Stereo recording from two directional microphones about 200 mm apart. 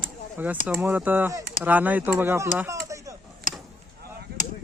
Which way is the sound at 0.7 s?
10° right (ahead or behind).